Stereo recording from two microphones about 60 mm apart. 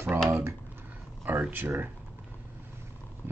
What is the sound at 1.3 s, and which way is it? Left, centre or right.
Speech, right.